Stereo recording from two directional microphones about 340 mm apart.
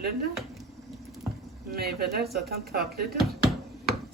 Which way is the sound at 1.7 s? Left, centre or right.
Right.